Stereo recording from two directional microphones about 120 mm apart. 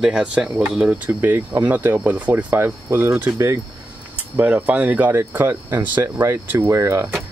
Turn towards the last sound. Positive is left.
turn(degrees=-25)  # may be behind; listen again after turning